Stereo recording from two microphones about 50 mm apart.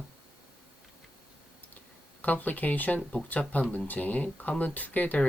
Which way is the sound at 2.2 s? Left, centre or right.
Left.